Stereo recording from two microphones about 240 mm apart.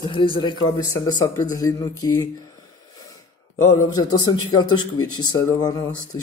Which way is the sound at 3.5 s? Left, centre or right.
Left.